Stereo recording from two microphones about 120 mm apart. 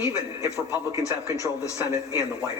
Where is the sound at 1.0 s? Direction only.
25° left (ahead or behind).